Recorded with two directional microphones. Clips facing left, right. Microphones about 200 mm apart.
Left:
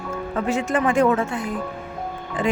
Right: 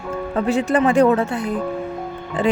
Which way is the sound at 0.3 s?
35° right (ahead or behind).